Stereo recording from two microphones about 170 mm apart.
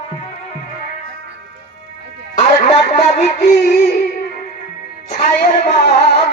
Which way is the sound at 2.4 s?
40° left (ahead or behind).